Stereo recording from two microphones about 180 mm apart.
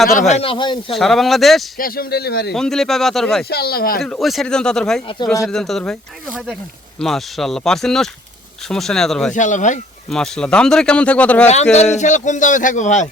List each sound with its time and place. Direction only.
0.2 s speech: 40° left (ahead or behind)
0.9 s speech: centre (ahead or behind)
1.8 s speech: 55° left (ahead or behind)
2.5 s speech: centre (ahead or behind)
3.5 s speech: 60° left (ahead or behind)
4.0 s speech: centre (ahead or behind)
9.3 s speech: 45° left (ahead or behind)
10.1 s speech: 5° left (ahead or behind)
11.7 s speech: 40° left (ahead or behind)